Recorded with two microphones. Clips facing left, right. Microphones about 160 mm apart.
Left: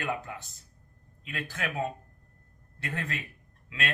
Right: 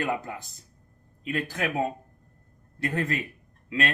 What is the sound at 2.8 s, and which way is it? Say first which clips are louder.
Speech: right 8 dB; 40° right (ahead or behind).